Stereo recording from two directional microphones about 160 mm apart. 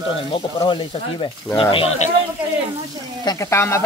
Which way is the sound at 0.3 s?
30° left (ahead or behind).